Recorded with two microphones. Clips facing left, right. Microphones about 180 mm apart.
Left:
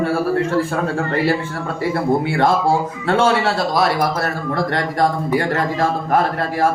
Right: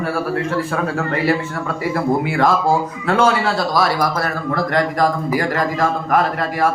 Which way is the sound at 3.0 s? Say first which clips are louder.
Even; 25° left (ahead or behind).